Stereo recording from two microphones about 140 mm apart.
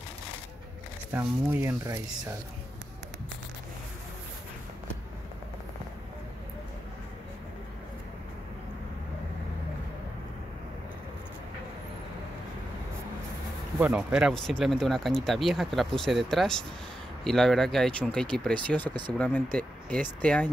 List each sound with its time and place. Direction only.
1.1 s speech: 15° right (ahead or behind)
13.7 s speech: 10° right (ahead or behind); by 20.4 s 10° left (ahead or behind)